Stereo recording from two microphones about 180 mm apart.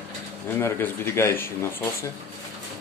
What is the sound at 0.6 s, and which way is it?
Speech, 15° left (ahead or behind).